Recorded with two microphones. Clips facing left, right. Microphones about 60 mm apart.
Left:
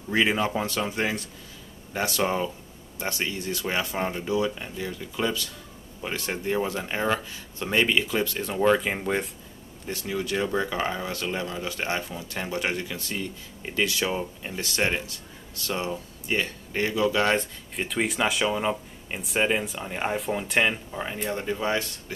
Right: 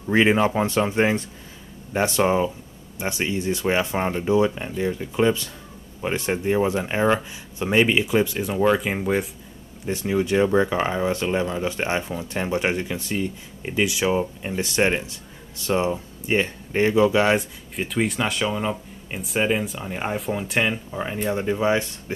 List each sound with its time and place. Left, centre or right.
0.1 s speech: right; by 9.3 s centre
9.8 s speech: right
17.7 s speech: centre